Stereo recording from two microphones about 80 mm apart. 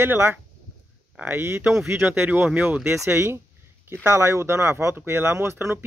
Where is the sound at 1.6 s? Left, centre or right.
Centre.